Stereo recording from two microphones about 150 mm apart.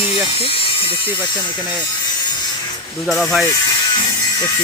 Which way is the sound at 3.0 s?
Centre (ahead or behind).